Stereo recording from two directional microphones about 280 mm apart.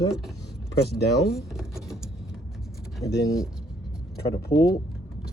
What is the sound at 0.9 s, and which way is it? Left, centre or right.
Speech, left.